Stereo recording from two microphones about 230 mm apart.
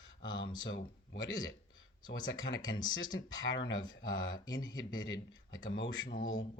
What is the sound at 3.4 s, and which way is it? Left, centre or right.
Speech, left.